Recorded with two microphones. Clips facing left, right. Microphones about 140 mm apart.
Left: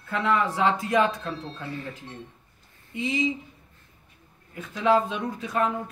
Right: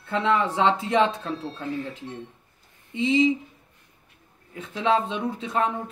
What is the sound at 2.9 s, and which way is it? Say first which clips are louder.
Speech: right 6 dB; 25° right (ahead or behind).